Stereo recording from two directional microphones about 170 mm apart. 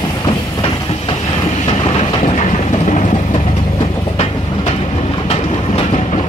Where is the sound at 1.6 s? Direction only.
35° left (ahead or behind).